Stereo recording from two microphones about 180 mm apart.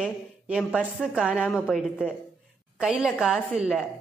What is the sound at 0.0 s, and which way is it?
A woman's voice, 5° right (ahead or behind).